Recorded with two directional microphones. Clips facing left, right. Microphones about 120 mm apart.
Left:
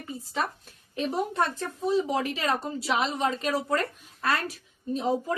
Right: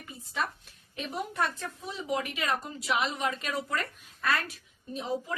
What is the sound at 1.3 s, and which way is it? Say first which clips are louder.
A woman's voice: left 4 dB; 35° left (ahead or behind).